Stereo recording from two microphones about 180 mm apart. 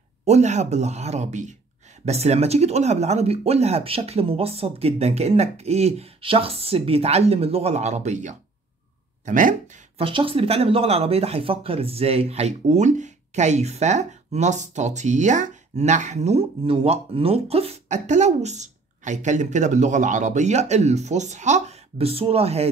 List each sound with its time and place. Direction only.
0.2 s speech: 40° right (ahead or behind)
9.9 s speech: 30° right (ahead or behind)